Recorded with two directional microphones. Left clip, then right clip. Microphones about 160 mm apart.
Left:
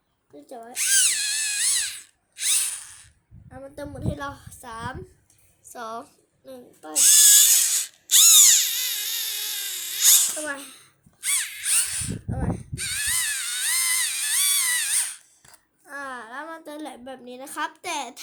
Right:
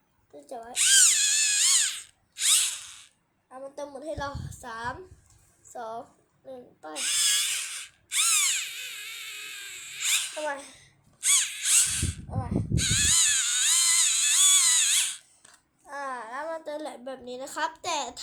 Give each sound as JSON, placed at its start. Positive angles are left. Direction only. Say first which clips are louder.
{"t": 0.3, "sound": "a woman's voice", "louder": "even", "side_deg": 30}
{"t": 0.7, "sound": "drill", "louder": "right 2 dB", "side_deg": 25}
{"t": 3.5, "sound": "a woman's voice", "louder": "left 1 dB", "side_deg": 40}
{"t": 5.6, "sound": "a woman's voice", "louder": "left 2 dB", "side_deg": 45}
{"t": 6.9, "sound": "owl", "louder": "left 9 dB", "side_deg": 30}
{"t": 8.1, "sound": "a sound", "louder": "left 10 dB", "side_deg": 25}
{"t": 9.6, "sound": "drill", "louder": "left 8 dB", "side_deg": 35}
{"t": 10.5, "sound": "a child's voice", "louder": "left 2 dB", "side_deg": 50}
{"t": 11.3, "sound": "a sound", "louder": "right 2 dB", "side_deg": 30}
{"t": 15.9, "sound": "a sound", "louder": "even", "side_deg": 45}